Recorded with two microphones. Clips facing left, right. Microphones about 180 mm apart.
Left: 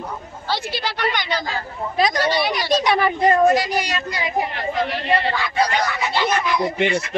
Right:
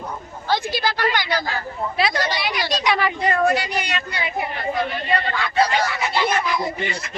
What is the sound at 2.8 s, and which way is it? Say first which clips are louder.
A woman's voice: left 2 dB; 45° left (ahead or behind).